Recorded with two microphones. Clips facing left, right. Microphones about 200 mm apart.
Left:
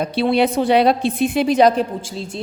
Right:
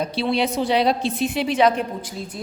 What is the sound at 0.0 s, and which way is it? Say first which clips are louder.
A woman's voice: left 5 dB; 55° left (ahead or behind).